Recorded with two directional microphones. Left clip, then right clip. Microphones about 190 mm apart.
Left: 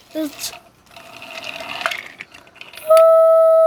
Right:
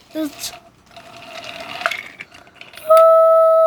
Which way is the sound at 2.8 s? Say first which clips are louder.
Even; 40° right (ahead or behind).